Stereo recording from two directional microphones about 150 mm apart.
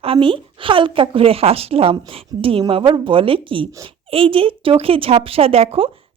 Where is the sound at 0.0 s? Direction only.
35° right (ahead or behind).